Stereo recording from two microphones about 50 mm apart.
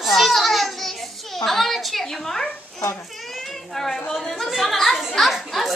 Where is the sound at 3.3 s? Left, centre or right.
Centre.